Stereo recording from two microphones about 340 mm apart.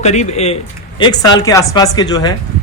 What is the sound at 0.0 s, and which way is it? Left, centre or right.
Speech, centre.